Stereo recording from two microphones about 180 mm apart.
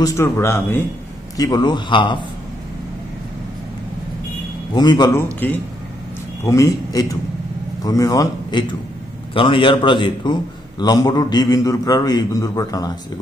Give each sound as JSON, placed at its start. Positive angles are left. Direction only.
{"t": 0.0, "sound": "a man's voice", "side_deg": 15}
{"t": 4.7, "sound": "a man's voice", "side_deg": 25}
{"t": 6.4, "sound": "a man's voice", "side_deg": 15}